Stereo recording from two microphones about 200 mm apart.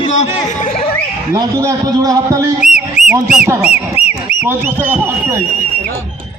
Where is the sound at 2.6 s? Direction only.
35° left (ahead or behind).